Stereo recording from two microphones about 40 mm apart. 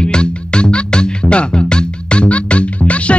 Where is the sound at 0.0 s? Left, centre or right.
Left.